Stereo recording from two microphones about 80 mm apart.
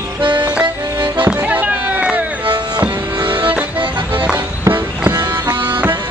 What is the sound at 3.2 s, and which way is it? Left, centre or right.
Music, right.